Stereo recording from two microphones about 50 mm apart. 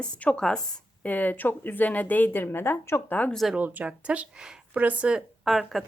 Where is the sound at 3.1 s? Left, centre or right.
Left.